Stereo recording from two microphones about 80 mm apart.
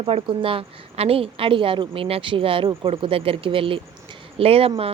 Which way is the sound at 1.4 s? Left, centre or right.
Right.